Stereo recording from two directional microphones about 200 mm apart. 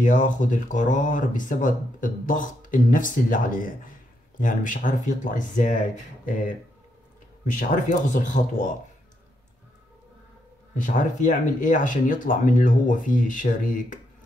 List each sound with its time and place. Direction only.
0.0 s speech: 40° left (ahead or behind)
7.5 s speech: 40° left (ahead or behind)
10.7 s speech: 40° left (ahead or behind)